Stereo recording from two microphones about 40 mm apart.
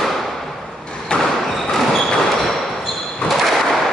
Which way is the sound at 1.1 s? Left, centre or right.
Left.